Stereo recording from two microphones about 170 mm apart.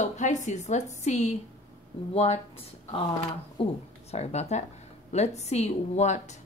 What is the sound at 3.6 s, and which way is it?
Speech, 40° left (ahead or behind).